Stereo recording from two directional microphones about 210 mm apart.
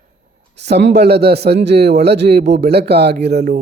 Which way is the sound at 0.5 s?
55° right (ahead or behind).